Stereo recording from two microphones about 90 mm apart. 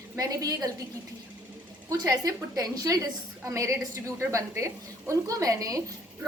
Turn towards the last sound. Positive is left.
turn(degrees=-40)  # may be behind; listen again after turning